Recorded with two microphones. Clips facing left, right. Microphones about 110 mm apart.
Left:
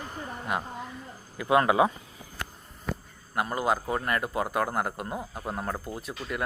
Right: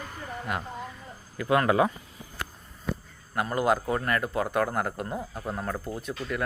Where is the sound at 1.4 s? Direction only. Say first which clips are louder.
Left 1 dB; 20° left (ahead or behind).